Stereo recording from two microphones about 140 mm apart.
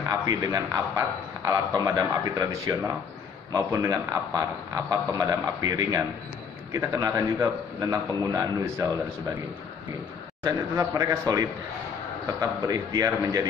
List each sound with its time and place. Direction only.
0.1 s a man's voice: 25° right (ahead or behind)
10.4 s a man's voice: 20° right (ahead or behind)